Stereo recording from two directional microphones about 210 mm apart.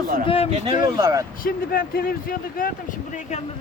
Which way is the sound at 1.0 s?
15° right (ahead or behind).